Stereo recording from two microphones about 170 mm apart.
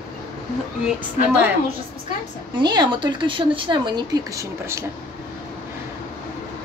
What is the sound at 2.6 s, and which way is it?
Speech, 25° right (ahead or behind).